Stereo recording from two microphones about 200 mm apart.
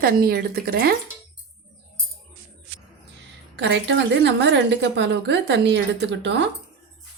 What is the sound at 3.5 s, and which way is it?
A woman's voice, 60° right (ahead or behind).